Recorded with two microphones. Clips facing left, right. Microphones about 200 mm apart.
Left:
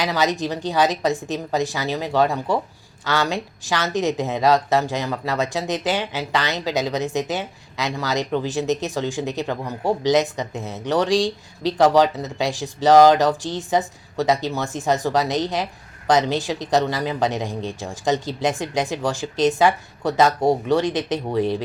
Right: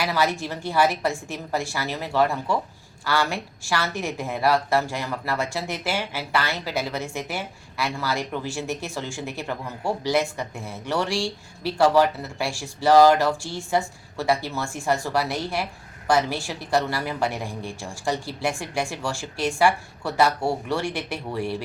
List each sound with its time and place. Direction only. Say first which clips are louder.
0.0 s a woman's voice: left 3 dB; 20° left (ahead or behind)